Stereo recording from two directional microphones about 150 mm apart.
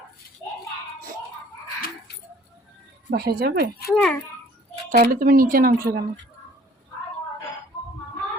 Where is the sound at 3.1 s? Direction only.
90° right.